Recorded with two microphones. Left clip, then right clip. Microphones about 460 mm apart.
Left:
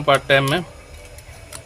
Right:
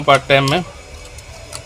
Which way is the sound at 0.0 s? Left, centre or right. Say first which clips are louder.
Right 3 dB; left.